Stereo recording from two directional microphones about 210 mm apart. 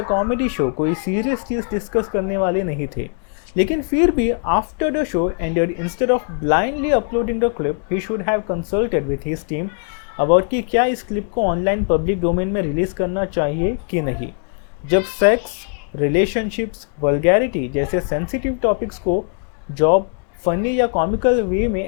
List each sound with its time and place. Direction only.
0.0 s speech: 20° left (ahead or behind)
10.2 s speech: 20° left (ahead or behind)
19.1 s speech: 30° left (ahead or behind); by 21.8 s 15° left (ahead or behind)